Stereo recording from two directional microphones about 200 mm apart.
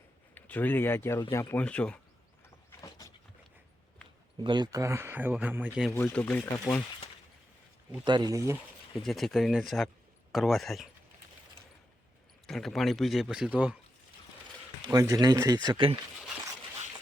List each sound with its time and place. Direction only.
0.3 s speech: 10° left (ahead or behind)
4.4 s speech: 20° right (ahead or behind); by 5.9 s 5° right (ahead or behind)
5.9 s speech: 10° left (ahead or behind)
8.0 s speech: 20° right (ahead or behind)
9.0 s speech: centre (ahead or behind)
12.5 s speech: centre (ahead or behind)
14.8 s speech: 15° right (ahead or behind)